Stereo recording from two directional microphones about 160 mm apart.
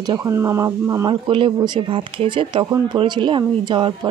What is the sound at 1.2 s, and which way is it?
Speech, 35° right (ahead or behind).